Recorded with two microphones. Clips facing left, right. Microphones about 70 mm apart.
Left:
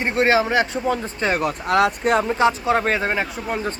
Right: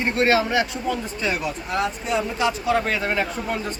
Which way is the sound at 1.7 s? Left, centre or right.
Left.